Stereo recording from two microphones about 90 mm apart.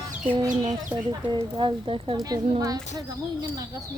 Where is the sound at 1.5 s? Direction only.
65° right (ahead or behind).